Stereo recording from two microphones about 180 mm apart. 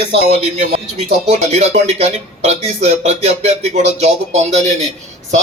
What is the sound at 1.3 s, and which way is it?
Speech, 40° right (ahead or behind).